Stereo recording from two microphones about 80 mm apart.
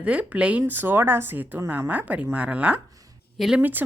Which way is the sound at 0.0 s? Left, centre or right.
Centre.